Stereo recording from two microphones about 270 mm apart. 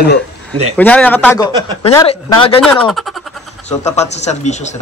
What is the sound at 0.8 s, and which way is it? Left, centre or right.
A man's voice, centre.